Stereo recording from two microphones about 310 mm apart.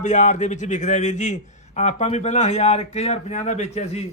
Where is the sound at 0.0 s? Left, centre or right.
Left.